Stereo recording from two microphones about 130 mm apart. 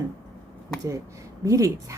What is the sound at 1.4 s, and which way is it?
Speech, 25° right (ahead or behind).